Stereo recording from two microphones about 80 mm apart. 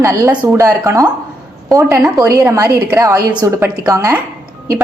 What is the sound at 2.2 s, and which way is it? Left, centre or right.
A woman's voice, right.